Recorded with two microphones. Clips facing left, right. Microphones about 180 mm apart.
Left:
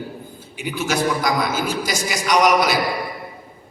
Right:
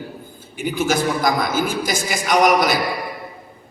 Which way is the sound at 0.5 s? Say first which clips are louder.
Right 3 dB; 50° right (ahead or behind).